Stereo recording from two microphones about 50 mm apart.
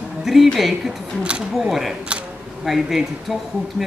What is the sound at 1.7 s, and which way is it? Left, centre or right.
Speech, centre.